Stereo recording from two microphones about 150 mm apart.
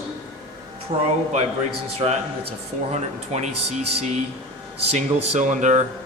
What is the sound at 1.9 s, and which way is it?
A man's voice, 40° right (ahead or behind).